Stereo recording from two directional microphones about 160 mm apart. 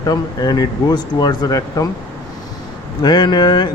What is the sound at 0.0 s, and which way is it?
Speech, 25° left (ahead or behind).